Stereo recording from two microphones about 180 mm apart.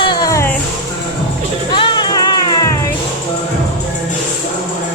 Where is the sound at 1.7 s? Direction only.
25° left (ahead or behind).